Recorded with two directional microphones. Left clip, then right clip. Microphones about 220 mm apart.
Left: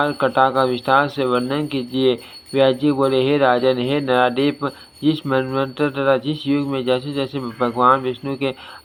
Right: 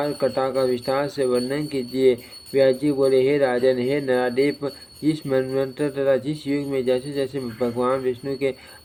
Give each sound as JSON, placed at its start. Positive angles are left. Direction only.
{"t": 0.0, "sound": "speech", "side_deg": 5}